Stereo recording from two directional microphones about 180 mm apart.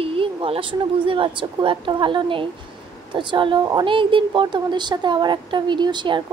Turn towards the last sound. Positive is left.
turn(degrees=-25)  # may be behind; listen again after turning